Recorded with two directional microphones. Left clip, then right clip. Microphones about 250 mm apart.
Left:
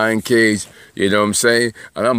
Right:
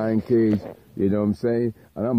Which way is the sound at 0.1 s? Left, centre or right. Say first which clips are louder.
Left 6 dB; centre.